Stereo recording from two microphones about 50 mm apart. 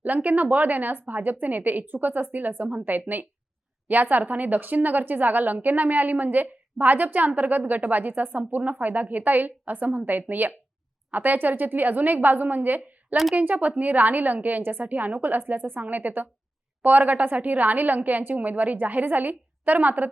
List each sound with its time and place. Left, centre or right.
0.0 s speech: right